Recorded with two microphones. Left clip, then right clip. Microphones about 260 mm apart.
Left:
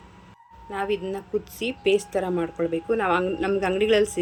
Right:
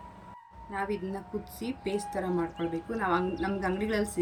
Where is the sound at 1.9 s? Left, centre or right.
Centre.